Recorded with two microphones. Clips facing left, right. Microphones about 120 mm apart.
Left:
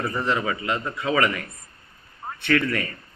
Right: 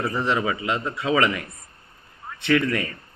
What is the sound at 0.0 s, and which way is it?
A man's voice, 20° right (ahead or behind).